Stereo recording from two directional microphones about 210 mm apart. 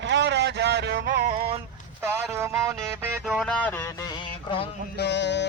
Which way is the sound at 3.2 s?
Centre (ahead or behind).